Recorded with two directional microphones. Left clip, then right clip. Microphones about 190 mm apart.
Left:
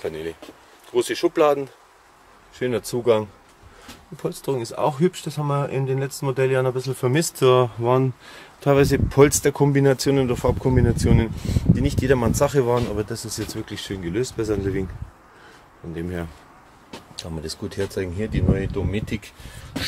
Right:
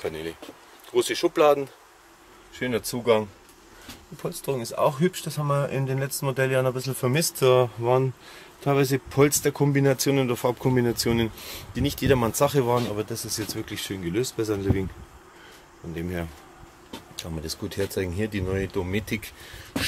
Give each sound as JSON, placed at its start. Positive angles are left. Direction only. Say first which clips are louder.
{"t": 0.0, "sound": "speech", "louder": "left 3 dB", "side_deg": 15}
{"t": 2.5, "sound": "speech", "louder": "left 4 dB", "side_deg": 25}
{"t": 10.7, "sound": "speech", "louder": "left 2 dB", "side_deg": -5}
{"t": 15.9, "sound": "speech", "louder": "left 2 dB", "side_deg": 10}
{"t": 17.7, "sound": "speech", "louder": "left 1 dB", "side_deg": 0}